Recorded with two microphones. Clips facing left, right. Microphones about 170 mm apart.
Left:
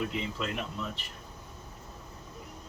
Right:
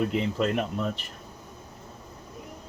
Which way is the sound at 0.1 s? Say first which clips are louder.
Right 9 dB; 55° right (ahead or behind).